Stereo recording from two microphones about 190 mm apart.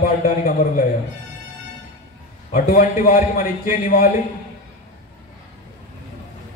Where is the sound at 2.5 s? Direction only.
40° left (ahead or behind).